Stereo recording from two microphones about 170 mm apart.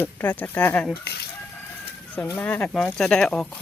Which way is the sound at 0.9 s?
70° left (ahead or behind).